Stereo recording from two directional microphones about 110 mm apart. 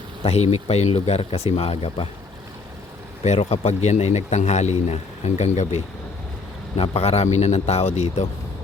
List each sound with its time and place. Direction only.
0.3 s speech: 70° left (ahead or behind)
3.2 s a man's voice: 70° left (ahead or behind); by 5.8 s 90° left
6.7 s speech: 60° left (ahead or behind); by 8.3 s 80° left